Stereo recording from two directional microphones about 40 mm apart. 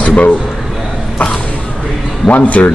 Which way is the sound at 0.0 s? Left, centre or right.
Left.